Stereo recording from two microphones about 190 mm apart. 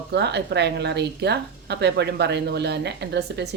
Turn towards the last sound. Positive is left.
turn(degrees=-60)  # may be behind; listen again after turning